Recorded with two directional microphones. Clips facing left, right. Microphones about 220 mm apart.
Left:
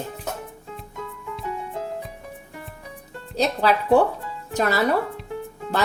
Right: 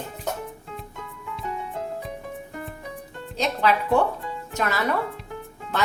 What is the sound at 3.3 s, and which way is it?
Speech, 35° left (ahead or behind).